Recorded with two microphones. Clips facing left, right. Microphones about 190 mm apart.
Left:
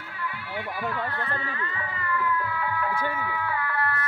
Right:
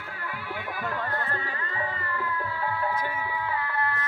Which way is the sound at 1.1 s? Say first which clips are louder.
Even; 35° right (ahead or behind).